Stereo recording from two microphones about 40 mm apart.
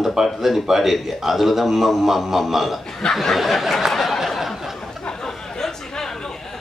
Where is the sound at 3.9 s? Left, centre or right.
Centre.